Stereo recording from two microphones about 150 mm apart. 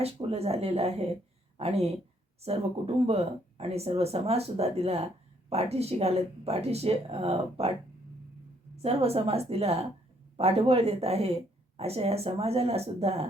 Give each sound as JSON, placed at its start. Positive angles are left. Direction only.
{"t": 0.0, "sound": "a woman's voice", "side_deg": -40}
{"t": 8.7, "sound": "speech", "side_deg": -40}